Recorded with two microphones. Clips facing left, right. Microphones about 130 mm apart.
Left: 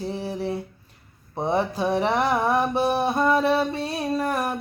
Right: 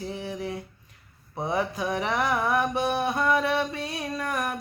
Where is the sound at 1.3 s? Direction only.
30° left (ahead or behind).